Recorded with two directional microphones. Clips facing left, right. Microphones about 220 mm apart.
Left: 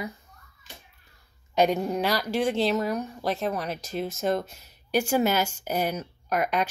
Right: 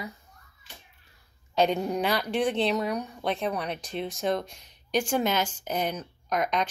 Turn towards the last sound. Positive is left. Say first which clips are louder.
# left 1 dB
turn(degrees=5)  # may be behind; listen again after turning